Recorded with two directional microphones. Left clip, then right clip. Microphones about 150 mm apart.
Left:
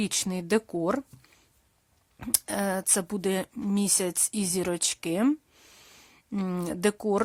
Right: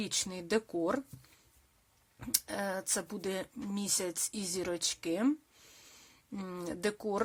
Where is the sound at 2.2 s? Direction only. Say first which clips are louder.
Left 6 dB; 50° left (ahead or behind).